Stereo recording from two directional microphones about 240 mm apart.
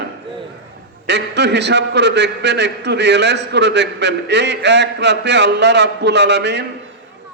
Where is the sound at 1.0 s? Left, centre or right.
Right.